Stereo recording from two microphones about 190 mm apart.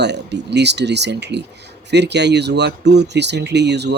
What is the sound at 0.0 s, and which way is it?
Speech, 65° right (ahead or behind).